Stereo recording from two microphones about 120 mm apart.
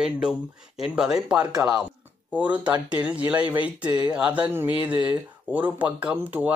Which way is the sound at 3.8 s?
35° right (ahead or behind).